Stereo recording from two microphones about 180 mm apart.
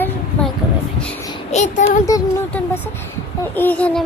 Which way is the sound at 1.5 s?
40° left (ahead or behind).